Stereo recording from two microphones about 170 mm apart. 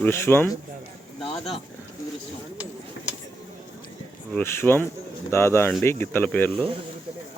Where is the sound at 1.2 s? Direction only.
30° left (ahead or behind).